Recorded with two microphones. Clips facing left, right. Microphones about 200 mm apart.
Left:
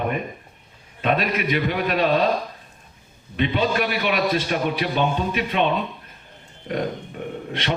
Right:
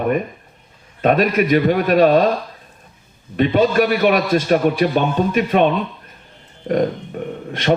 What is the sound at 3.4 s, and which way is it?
A man's voice, 45° right (ahead or behind).